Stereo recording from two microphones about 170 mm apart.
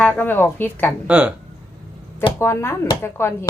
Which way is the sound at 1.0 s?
10° right (ahead or behind).